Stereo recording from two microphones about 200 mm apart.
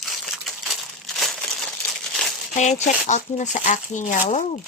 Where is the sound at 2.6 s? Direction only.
35° left (ahead or behind).